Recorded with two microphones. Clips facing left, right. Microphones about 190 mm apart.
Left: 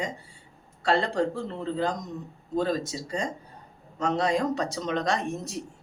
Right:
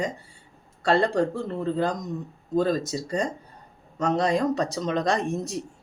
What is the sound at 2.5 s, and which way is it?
Speech, 40° right (ahead or behind).